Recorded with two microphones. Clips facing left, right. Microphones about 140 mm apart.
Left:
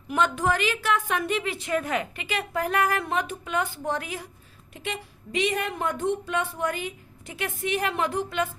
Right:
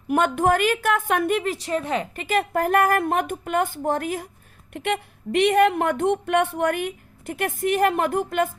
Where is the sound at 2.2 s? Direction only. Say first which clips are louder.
Right 6 dB; 50° right (ahead or behind).